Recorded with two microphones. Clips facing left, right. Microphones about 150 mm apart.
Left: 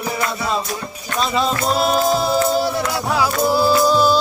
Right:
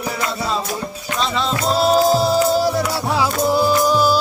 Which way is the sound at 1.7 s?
35° right (ahead or behind).